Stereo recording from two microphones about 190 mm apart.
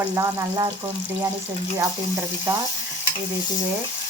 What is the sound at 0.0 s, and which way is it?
Speech, 15° right (ahead or behind).